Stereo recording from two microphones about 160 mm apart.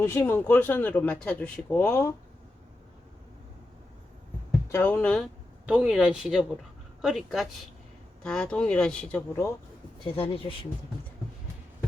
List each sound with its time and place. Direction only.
0.0 s speech: 15° left (ahead or behind)
4.7 s speech: 10° left (ahead or behind)
5.6 s a woman's voice: 5° right (ahead or behind); by 9.5 s 10° left (ahead or behind)
10.0 s speech: 30° left (ahead or behind)